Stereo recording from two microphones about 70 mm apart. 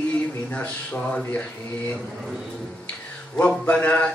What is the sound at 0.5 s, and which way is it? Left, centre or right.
Speech, centre.